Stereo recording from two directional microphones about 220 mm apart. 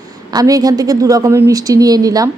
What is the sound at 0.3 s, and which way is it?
A woman's voice, 15° right (ahead or behind).